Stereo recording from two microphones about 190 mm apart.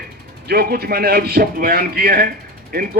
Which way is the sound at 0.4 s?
55° right (ahead or behind).